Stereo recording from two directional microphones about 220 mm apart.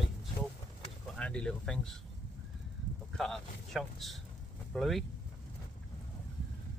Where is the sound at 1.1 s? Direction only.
5° left (ahead or behind).